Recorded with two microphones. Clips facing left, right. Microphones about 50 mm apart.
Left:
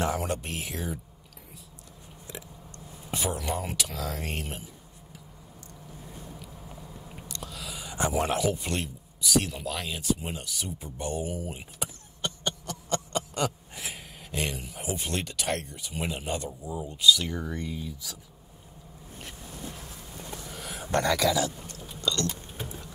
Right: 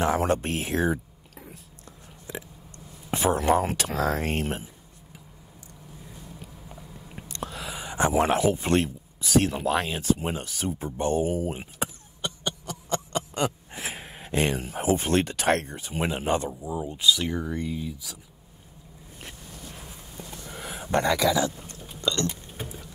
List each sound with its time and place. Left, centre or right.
0.0 s speech: right
3.1 s speech: right
7.2 s speech: right
12.2 s a sound: centre
13.4 s speech: right
17.4 s speech: centre
19.7 s a sound: centre
20.5 s a sound: right
20.8 s speech: right